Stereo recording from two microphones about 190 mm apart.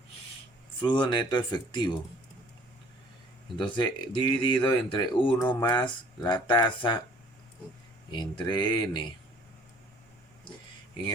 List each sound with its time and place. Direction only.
0.8 s speech: 25° left (ahead or behind)
3.6 s speech: 25° left (ahead or behind)
8.1 s speech: 25° left (ahead or behind)